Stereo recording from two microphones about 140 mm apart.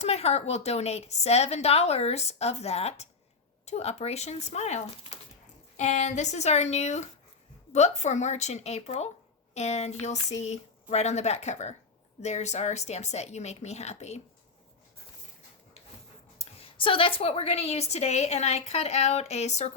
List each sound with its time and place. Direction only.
0.0 s a woman's voice: 50° left (ahead or behind)
16.4 s a woman's voice: 40° left (ahead or behind)